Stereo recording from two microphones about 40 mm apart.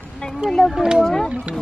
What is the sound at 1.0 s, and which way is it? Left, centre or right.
Speech, centre.